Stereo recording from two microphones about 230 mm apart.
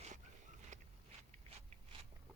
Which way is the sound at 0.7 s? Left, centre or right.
Right.